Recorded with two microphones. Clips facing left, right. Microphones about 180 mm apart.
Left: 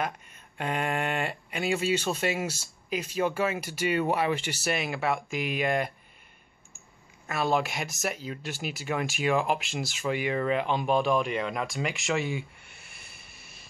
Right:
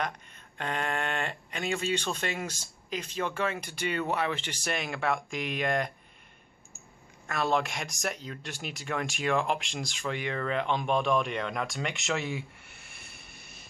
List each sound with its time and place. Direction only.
0.6 s speech: 10° left (ahead or behind)
7.2 s speech: 5° left (ahead or behind)